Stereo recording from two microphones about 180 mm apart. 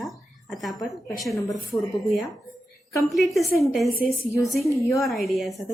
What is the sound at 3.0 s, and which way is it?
Speech, centre (ahead or behind).